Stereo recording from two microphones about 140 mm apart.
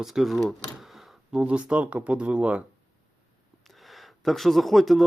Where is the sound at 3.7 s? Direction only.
Centre (ahead or behind).